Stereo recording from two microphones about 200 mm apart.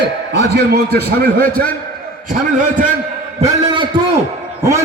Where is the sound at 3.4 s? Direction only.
25° right (ahead or behind).